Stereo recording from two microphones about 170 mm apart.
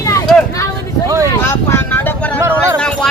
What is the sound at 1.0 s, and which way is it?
Speech, 20° right (ahead or behind).